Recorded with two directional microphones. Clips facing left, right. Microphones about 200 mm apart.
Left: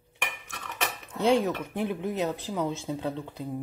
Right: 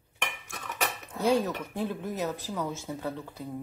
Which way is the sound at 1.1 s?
25° left (ahead or behind).